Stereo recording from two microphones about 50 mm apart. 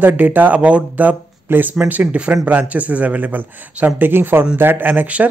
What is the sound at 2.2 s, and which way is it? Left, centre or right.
Speech, right.